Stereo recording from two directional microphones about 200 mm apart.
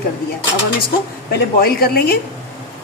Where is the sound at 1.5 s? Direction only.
50° left (ahead or behind).